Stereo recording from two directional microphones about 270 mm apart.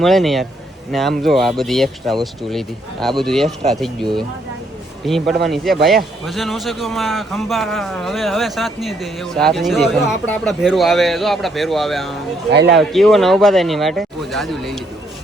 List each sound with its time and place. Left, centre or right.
0.0 s speech: centre
12.5 s a man's voice: right
12.7 s speech: centre